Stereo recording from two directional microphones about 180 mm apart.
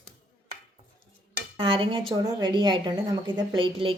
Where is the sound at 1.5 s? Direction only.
30° right (ahead or behind).